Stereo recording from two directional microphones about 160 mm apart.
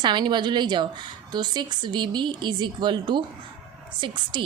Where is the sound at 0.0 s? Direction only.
30° right (ahead or behind).